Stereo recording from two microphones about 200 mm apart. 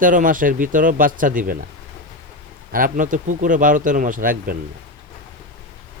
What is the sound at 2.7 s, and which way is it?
Speech, 45° right (ahead or behind).